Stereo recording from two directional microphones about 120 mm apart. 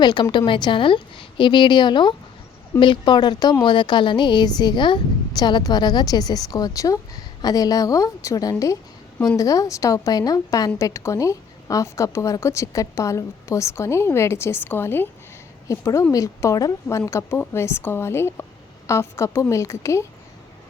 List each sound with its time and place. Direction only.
0.0 s a woman's voice: 40° left (ahead or behind)